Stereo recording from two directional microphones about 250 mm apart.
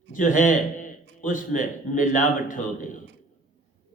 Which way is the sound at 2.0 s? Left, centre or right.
Left.